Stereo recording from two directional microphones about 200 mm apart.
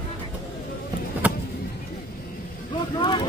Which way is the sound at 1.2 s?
5° right (ahead or behind).